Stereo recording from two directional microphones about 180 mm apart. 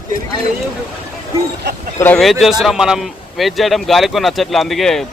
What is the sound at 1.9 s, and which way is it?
Speech, 10° left (ahead or behind).